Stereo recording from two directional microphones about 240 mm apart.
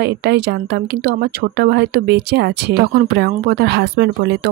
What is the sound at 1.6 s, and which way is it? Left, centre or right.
Speech, right.